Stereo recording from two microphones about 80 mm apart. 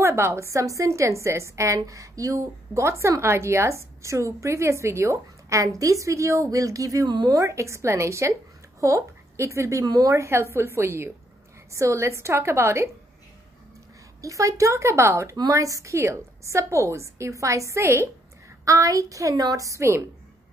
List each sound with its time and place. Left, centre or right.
0.0 s a woman's voice: right
7.1 s speech: right
7.3 s a woman's voice: right
14.2 s a woman's voice: right
15.3 s a woman's voice: right